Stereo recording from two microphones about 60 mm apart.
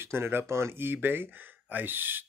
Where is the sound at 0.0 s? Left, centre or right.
Right.